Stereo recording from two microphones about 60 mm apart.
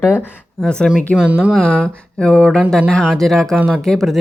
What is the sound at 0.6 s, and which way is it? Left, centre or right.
Speech, centre.